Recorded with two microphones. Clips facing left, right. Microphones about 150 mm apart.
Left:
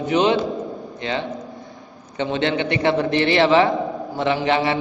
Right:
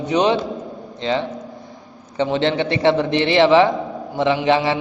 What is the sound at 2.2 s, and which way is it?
A man's voice, 25° right (ahead or behind).